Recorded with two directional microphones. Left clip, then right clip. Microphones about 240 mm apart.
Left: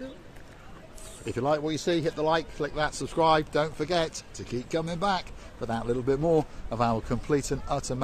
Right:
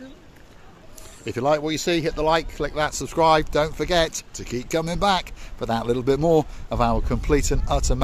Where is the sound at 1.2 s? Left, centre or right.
Right.